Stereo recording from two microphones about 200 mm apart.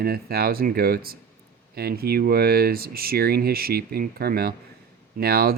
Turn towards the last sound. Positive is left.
turn(degrees=-50)  # may be behind; listen again after turning